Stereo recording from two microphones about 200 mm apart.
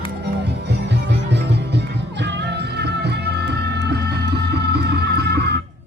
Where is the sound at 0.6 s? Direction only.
60° right (ahead or behind).